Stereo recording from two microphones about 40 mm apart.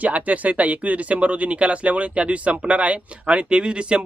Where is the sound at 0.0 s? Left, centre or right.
Right.